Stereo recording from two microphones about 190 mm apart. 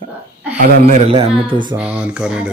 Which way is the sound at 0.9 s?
30° right (ahead or behind).